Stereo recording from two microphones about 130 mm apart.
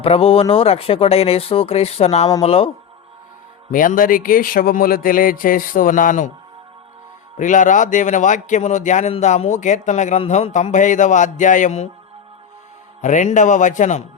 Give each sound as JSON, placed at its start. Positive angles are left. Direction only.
{"t": 0.0, "sound": "speech", "side_deg": 45}
{"t": 3.7, "sound": "speech", "side_deg": 90}
{"t": 7.3, "sound": "a man's voice", "side_deg": 75}
{"t": 13.0, "sound": "a man's voice", "side_deg": 70}